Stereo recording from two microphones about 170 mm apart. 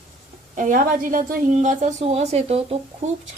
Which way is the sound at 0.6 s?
50° right (ahead or behind).